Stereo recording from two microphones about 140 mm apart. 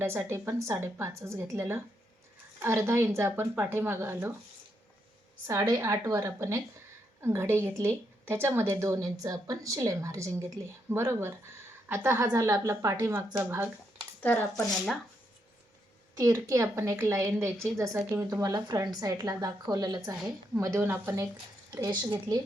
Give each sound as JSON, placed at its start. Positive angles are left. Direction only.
{"t": 0.0, "sound": "a woman's voice", "side_deg": -15}
{"t": 5.5, "sound": "a woman's voice", "side_deg": -25}
{"t": 16.1, "sound": "a woman's voice", "side_deg": -25}